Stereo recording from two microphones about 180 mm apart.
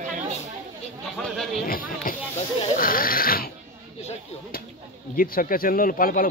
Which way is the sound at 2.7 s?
50° left (ahead or behind).